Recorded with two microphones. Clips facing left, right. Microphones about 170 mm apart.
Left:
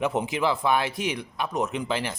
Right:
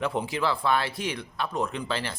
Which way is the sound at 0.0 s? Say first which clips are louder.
Left 2 dB; 20° left (ahead or behind).